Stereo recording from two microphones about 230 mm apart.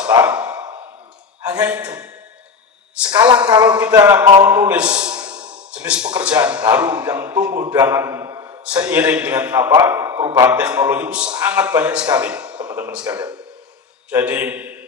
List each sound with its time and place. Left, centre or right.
0.2 s a sound: centre
1.5 s speech: centre
3.1 s a man's voice: centre
11.3 s a man's voice: centre